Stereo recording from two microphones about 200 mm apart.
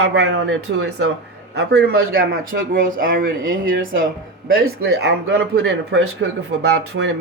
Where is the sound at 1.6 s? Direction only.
55° right (ahead or behind).